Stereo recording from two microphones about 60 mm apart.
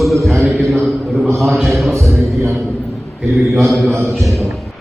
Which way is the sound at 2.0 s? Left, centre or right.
Right.